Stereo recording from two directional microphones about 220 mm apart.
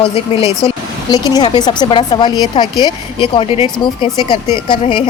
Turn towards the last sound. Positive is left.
turn(degrees=20)  # may be behind; listen again after turning